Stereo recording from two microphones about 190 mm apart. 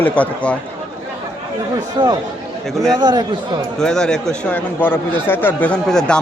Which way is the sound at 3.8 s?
5° left (ahead or behind).